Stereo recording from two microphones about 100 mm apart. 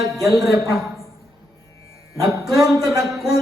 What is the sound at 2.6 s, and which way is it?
Speech, 35° right (ahead or behind).